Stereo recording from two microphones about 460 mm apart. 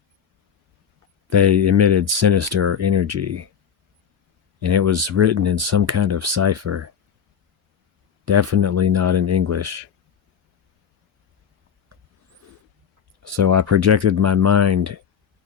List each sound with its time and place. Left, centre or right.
1.3 s speech: right
4.6 s speech: right
8.2 s speech: right
13.2 s speech: right